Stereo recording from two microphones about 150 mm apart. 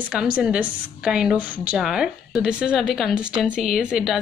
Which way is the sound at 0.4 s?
5° right (ahead or behind).